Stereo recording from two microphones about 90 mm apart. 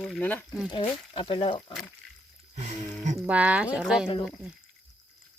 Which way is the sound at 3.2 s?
15° right (ahead or behind).